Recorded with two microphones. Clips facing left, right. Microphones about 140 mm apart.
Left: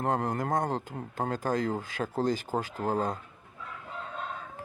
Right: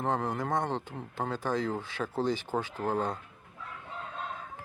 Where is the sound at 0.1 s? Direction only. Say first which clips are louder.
Left 2 dB; 40° left (ahead or behind).